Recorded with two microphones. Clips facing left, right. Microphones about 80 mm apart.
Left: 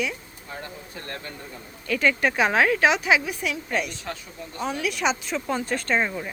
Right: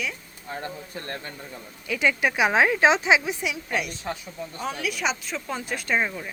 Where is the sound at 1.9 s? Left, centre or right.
Centre.